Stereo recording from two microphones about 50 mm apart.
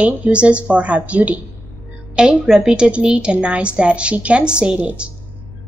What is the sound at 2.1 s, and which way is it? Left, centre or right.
A woman's voice, centre.